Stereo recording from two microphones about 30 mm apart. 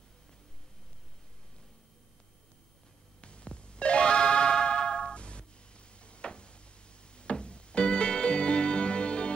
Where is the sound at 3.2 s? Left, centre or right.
Left.